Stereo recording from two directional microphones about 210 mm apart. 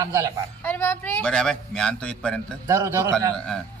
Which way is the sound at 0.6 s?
10° left (ahead or behind).